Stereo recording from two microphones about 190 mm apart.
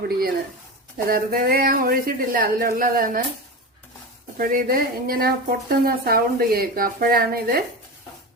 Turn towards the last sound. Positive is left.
turn(degrees=-50)  # may be behind; listen again after turning